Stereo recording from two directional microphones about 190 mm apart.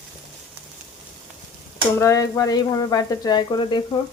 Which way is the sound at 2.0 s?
15° left (ahead or behind).